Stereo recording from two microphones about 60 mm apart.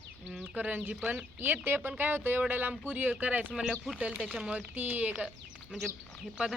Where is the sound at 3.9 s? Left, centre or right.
Right.